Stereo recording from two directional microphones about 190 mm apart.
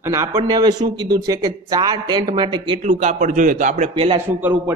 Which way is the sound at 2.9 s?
40° right (ahead or behind).